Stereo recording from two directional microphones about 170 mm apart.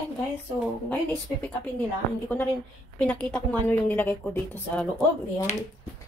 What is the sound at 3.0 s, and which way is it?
Speech, 5° left (ahead or behind).